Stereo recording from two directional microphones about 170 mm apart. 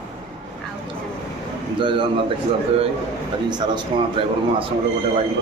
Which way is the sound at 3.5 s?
30° right (ahead or behind).